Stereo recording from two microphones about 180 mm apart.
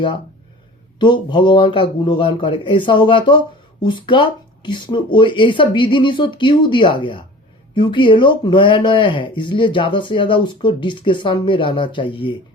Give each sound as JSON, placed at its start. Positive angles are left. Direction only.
{"t": 0.9, "sound": "speech", "side_deg": 25}